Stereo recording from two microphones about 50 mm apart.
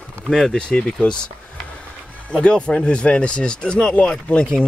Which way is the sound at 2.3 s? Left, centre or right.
Centre.